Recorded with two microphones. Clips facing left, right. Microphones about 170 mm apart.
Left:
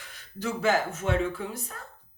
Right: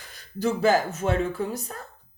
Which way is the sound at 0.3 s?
35° right (ahead or behind).